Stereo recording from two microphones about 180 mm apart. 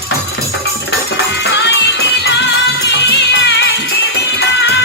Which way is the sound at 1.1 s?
75° left (ahead or behind).